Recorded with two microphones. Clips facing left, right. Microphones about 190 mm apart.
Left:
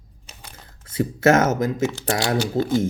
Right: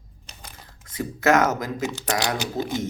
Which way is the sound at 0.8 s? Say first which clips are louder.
Left 4 dB; 30° left (ahead or behind).